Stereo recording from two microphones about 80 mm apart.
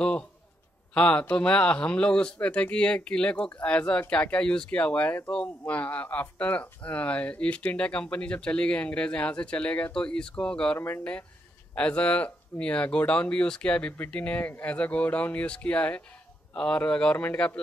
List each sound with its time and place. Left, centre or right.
0.9 s speech: centre